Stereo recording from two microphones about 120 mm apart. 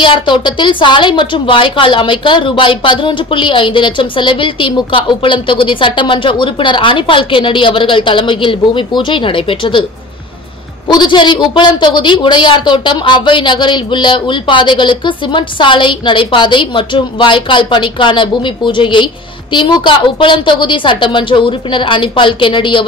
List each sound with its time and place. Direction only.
0.0 s a woman's voice: 40° left (ahead or behind)
10.9 s a woman's voice: 40° left (ahead or behind)